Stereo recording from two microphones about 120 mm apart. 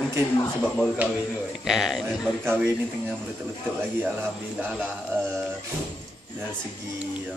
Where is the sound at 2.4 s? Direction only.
15° right (ahead or behind).